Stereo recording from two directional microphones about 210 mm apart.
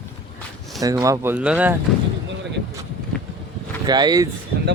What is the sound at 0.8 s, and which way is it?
Speech, 15° right (ahead or behind).